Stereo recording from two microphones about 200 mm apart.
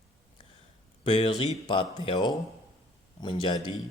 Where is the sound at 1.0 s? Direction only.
25° left (ahead or behind).